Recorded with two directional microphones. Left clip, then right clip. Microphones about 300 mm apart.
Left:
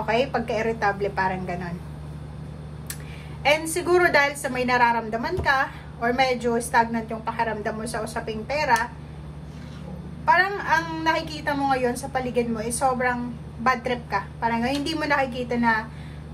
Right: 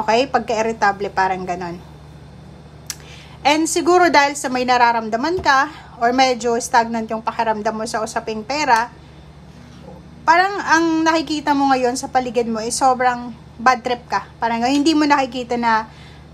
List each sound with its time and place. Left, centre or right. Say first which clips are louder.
0.0 s a woman's voice: right 7 dB; centre
3.4 s a woman's voice: right 6 dB; centre
10.2 s a woman's voice: right 5 dB; centre